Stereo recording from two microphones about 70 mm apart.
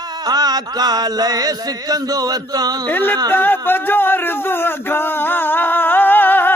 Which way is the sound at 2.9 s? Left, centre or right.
Left.